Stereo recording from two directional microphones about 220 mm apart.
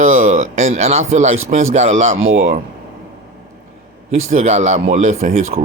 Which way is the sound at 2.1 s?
70° right (ahead or behind).